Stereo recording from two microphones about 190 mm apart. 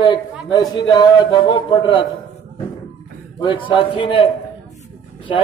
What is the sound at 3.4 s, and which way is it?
A man's voice, 25° left (ahead or behind).